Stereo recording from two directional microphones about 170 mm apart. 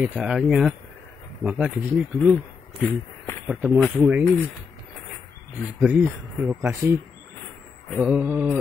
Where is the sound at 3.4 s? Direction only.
10° right (ahead or behind).